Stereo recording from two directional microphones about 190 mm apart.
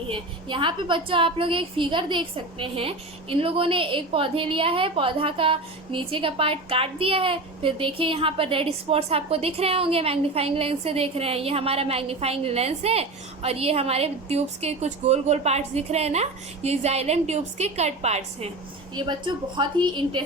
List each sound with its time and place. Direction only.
0.1 s a woman's voice: 25° right (ahead or behind)